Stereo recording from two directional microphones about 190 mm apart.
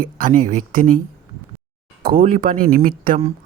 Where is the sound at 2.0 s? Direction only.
50° right (ahead or behind).